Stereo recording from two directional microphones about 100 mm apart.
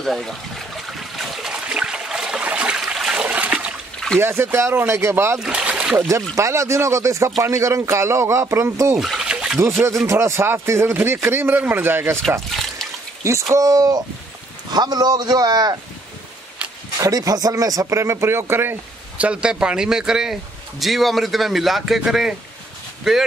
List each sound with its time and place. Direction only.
0.0 s trickle: 5° left (ahead or behind); by 3.7 s 15° right (ahead or behind)
4.2 s speech: 25° right (ahead or behind)
5.4 s speech: 10° right (ahead or behind)
6.0 s speech: 30° right (ahead or behind)
9.0 s a sound: 5° right (ahead or behind)
9.6 s speech: 30° right (ahead or behind)
12.4 s water: 5° left (ahead or behind)
13.2 s a man's voice: 30° right (ahead or behind)
17.0 s speech: 35° right (ahead or behind)
19.2 s a man's voice: 10° right (ahead or behind)